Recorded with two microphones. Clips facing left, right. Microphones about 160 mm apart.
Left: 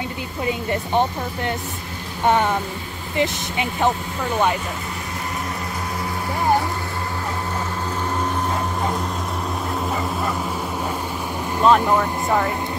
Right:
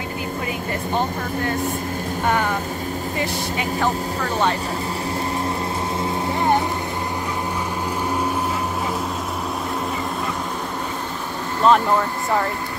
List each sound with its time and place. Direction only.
0.5 s speech: 25° left (ahead or behind)
3.2 s speech: 20° left (ahead or behind)
11.6 s speech: 5° left (ahead or behind)